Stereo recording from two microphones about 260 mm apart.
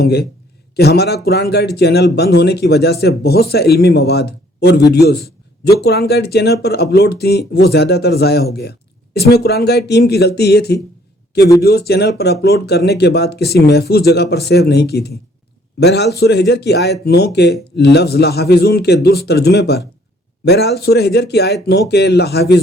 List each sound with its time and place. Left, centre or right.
0.0 s speech: left